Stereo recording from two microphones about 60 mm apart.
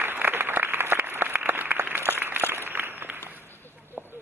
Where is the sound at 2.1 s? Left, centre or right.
Right.